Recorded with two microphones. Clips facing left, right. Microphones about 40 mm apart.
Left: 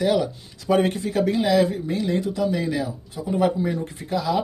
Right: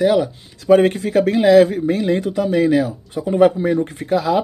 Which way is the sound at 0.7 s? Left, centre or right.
Right.